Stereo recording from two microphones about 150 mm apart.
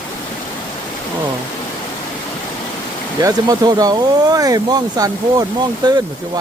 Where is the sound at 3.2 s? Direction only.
25° right (ahead or behind).